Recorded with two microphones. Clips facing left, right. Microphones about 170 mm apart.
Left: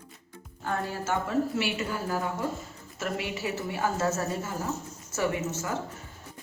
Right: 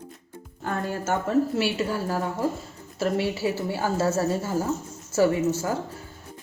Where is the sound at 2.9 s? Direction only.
30° right (ahead or behind).